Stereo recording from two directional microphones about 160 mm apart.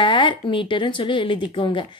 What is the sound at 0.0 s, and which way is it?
Speech, 30° left (ahead or behind).